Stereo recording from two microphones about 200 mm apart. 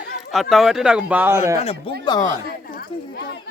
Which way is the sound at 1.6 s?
30° left (ahead or behind).